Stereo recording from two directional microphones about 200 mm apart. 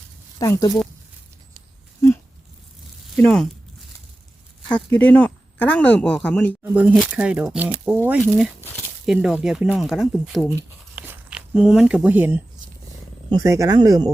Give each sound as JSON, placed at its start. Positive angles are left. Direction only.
{"t": 0.3, "sound": "speech", "side_deg": 15}
{"t": 3.2, "sound": "speech", "side_deg": 5}
{"t": 4.7, "sound": "speech", "side_deg": 5}
{"t": 6.6, "sound": "speech", "side_deg": -5}
{"t": 10.9, "sound": "a sound", "side_deg": -5}
{"t": 13.4, "sound": "speech", "side_deg": -15}